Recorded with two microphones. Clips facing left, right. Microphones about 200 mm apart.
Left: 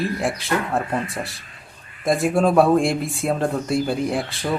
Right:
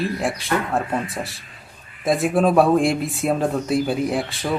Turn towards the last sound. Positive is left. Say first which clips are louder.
# right 1 dB
turn(degrees=0)  # may be behind; listen again after turning